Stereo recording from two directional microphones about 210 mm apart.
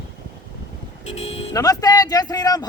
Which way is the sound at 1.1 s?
30° left (ahead or behind).